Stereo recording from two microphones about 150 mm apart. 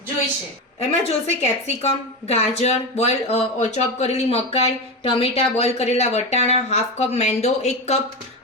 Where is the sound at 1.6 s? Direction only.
45° left (ahead or behind).